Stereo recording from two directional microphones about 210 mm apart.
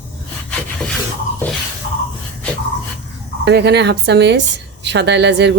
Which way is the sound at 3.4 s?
55° right (ahead or behind).